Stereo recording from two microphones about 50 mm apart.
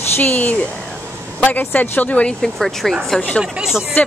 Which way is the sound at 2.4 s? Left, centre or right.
Centre.